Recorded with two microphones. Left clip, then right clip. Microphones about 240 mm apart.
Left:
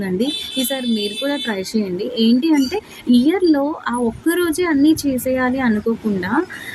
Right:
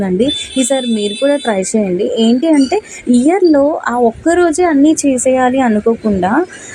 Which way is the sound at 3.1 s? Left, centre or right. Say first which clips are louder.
Right 6 dB; centre.